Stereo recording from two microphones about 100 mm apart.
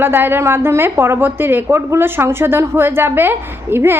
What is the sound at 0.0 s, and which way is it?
A woman's voice, 20° right (ahead or behind).